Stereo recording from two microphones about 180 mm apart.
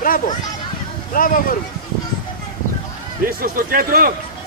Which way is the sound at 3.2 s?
55° right (ahead or behind).